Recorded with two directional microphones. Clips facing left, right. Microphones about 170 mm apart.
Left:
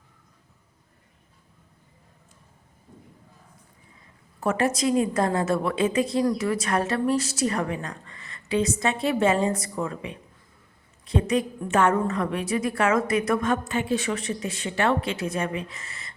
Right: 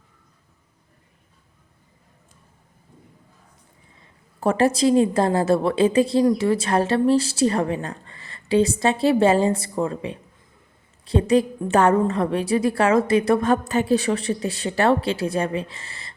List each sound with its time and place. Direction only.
4.4 s a woman's voice: 30° right (ahead or behind)